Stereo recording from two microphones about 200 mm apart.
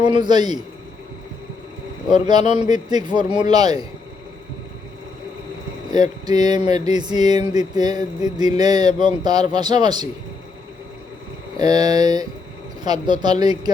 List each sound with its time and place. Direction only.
0.0 s speech: 25° right (ahead or behind)
2.4 s speech: 35° left (ahead or behind)
2.6 s speech: 20° right (ahead or behind)
5.9 s speech: 20° right (ahead or behind)
11.5 s speech: 20° right (ahead or behind)